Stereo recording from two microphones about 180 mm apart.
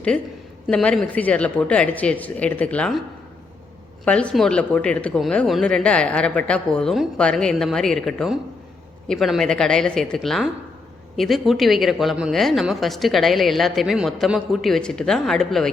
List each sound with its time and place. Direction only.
0.7 s speech: 5° left (ahead or behind)
4.0 s speech: 5° left (ahead or behind)